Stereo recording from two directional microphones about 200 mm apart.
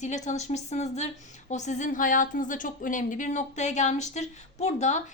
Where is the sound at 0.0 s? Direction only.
35° left (ahead or behind).